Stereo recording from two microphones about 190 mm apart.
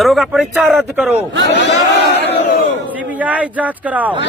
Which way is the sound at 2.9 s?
10° right (ahead or behind).